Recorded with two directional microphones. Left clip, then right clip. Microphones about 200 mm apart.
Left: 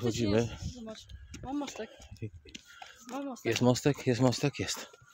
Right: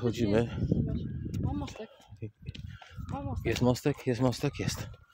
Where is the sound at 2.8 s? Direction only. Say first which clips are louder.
Left 1 dB; 40° left (ahead or behind).